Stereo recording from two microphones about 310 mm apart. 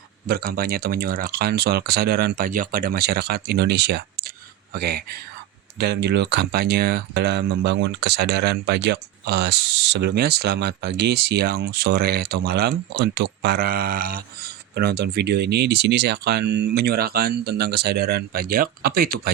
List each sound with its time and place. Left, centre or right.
0.3 s speech: right